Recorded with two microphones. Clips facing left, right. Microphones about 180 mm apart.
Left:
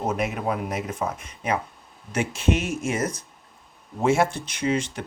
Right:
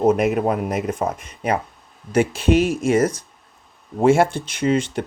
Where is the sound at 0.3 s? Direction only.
50° right (ahead or behind).